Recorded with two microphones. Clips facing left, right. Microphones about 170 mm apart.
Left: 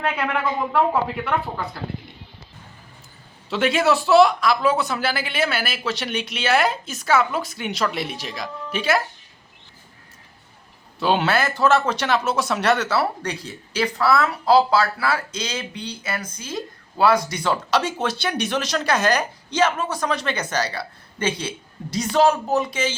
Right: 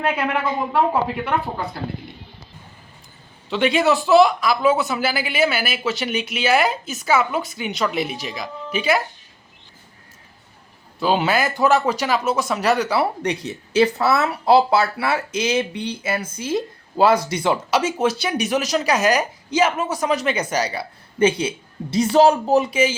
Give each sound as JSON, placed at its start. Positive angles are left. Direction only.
{"t": 0.0, "sound": "speech", "side_deg": -5}
{"t": 3.5, "sound": "speech", "side_deg": 0}
{"t": 11.0, "sound": "speech", "side_deg": 0}
{"t": 11.3, "sound": "a man's voice", "side_deg": -15}
{"t": 11.9, "sound": "speech", "side_deg": 0}
{"t": 12.8, "sound": "speech", "side_deg": -15}
{"t": 17.5, "sound": "speech", "side_deg": -5}
{"t": 21.8, "sound": "a man's voice", "side_deg": -30}
{"t": 22.5, "sound": "a man's voice", "side_deg": -10}